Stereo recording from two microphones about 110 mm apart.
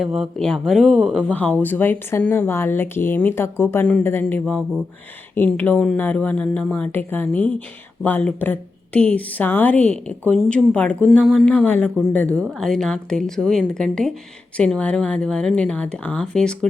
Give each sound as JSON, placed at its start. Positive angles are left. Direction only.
{"t": 0.0, "sound": "a woman's voice", "side_deg": -5}